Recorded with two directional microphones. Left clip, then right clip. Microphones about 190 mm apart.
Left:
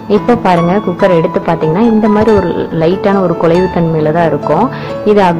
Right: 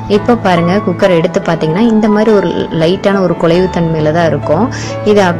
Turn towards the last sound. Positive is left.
turn(degrees=-25)  # may be behind; listen again after turning